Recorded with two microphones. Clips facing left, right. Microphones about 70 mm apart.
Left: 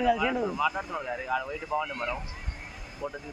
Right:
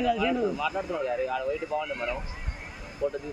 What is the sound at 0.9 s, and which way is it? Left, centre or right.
Speech, centre.